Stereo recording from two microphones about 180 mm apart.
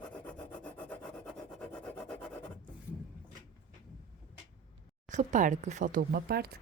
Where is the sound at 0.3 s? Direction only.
5° left (ahead or behind).